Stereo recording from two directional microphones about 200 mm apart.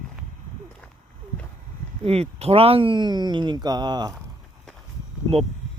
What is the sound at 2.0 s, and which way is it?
Speech, 30° right (ahead or behind).